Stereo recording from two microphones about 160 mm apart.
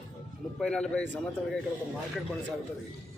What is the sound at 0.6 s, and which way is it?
Speech, 5° left (ahead or behind).